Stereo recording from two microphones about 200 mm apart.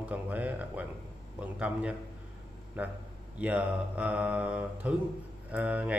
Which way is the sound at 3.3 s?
5° right (ahead or behind).